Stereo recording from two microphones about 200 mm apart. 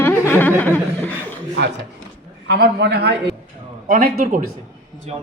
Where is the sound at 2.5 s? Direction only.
55° right (ahead or behind).